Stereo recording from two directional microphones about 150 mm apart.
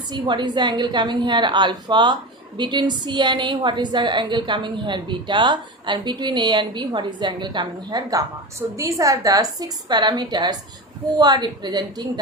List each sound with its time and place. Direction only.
0.1 s a woman's voice: 30° right (ahead or behind)